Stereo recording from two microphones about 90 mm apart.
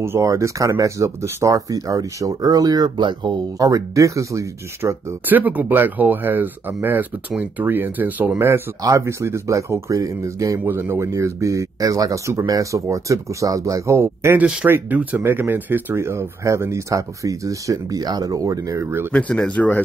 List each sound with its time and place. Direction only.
0.0 s speech: 30° right (ahead or behind); by 3.6 s 55° right (ahead or behind)
3.6 s speech: 35° right (ahead or behind)
5.2 s speech: 20° right (ahead or behind)
8.8 s speech: 35° right (ahead or behind)
14.4 s speech: 15° right (ahead or behind); by 19.0 s 30° right (ahead or behind)
19.1 s speech: 10° left (ahead or behind)